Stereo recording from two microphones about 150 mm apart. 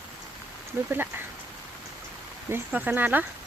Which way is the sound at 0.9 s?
15° right (ahead or behind).